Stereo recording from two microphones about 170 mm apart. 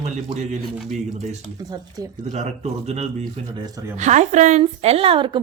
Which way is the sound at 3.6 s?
20° right (ahead or behind).